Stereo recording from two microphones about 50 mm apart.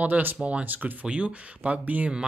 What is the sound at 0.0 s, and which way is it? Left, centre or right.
Speech, right.